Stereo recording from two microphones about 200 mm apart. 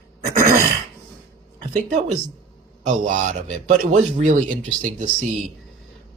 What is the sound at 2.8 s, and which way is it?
A man's voice, 40° right (ahead or behind).